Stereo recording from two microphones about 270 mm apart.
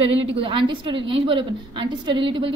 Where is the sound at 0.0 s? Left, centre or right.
Centre.